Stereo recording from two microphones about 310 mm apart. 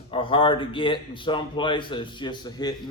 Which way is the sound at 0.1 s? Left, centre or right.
Centre.